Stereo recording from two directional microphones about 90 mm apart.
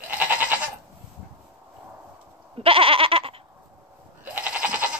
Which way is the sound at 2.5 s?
90° right.